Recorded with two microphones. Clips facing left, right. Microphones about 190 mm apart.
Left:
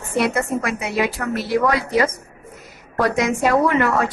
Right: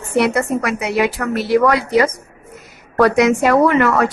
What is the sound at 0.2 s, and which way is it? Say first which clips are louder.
A woman's voice: right 4 dB; 75° right (ahead or behind).